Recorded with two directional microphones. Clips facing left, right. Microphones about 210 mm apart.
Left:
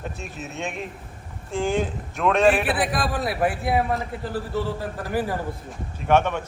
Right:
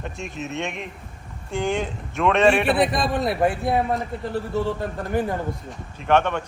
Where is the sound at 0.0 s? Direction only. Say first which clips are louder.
Right 2 dB; centre (ahead or behind).